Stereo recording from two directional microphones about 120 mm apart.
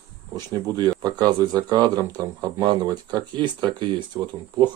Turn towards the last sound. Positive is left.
turn(degrees=-40)  # may be behind; listen again after turning